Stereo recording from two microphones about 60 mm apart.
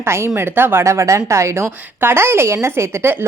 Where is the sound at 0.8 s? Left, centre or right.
Right.